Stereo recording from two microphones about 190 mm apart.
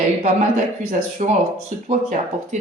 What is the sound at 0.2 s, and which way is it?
A woman's voice, 40° right (ahead or behind).